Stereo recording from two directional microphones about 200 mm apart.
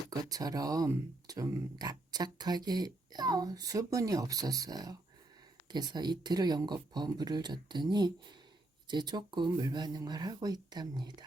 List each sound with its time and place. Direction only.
0.1 s speech: 20° right (ahead or behind)